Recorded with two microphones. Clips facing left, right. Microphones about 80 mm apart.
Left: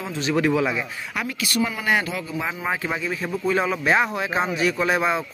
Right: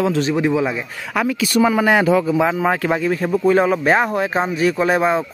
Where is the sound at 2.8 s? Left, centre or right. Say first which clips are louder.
Right 8 dB; right.